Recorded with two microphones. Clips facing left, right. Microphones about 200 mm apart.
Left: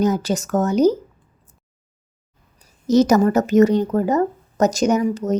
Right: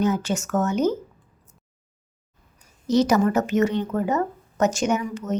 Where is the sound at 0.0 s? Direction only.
35° left (ahead or behind).